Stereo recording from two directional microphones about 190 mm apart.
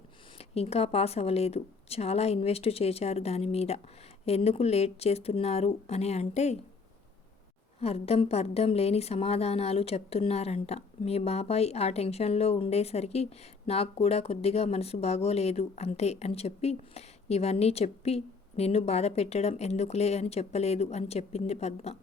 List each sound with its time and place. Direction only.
0.3 s a woman's voice: 30° left (ahead or behind)
7.8 s a woman's voice: 30° left (ahead or behind)